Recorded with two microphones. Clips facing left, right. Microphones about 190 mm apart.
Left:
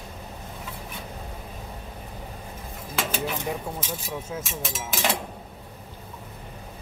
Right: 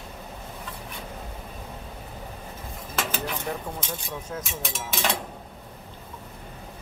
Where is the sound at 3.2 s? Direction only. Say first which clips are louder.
Left 2 dB; 10° left (ahead or behind).